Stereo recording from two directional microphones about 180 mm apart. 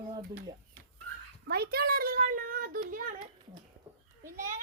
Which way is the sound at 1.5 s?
60° right (ahead or behind).